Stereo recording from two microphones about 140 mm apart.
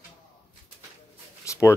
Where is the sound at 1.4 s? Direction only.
20° left (ahead or behind).